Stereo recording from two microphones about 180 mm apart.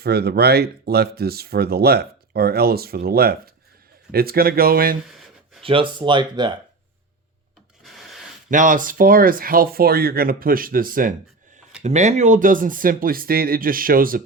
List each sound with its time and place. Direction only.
0.0 s speech: 60° right (ahead or behind)
5.6 s speech: 30° right (ahead or behind)
7.9 s a sound: centre (ahead or behind)
8.4 s speech: 45° right (ahead or behind)
11.8 s speech: 40° right (ahead or behind)